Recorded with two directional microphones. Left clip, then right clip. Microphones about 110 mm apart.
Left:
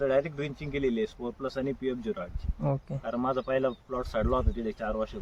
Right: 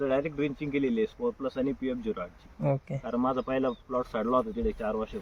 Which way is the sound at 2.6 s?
10° left (ahead or behind).